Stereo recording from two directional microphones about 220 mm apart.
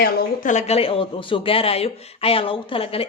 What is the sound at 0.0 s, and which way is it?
A man's voice, 35° left (ahead or behind).